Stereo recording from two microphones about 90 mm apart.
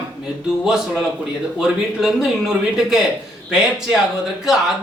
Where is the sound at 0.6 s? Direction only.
5° right (ahead or behind).